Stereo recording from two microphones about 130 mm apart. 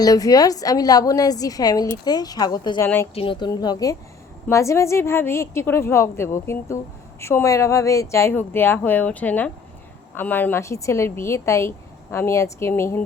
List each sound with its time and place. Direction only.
0.0 s a woman's voice: 30° left (ahead or behind)
2.8 s speech: 15° left (ahead or behind)
3.2 s a woman's voice: 40° left (ahead or behind); by 13.0 s 20° left (ahead or behind)